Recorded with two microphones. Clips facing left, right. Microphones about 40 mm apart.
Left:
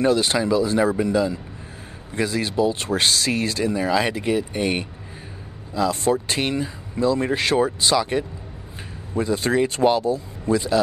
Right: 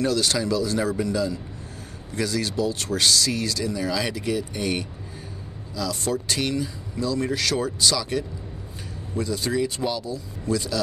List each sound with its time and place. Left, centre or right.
0.0 s speech: left